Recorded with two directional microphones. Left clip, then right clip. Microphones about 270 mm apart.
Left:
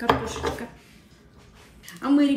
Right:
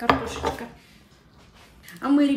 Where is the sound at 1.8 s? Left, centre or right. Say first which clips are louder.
Even; centre.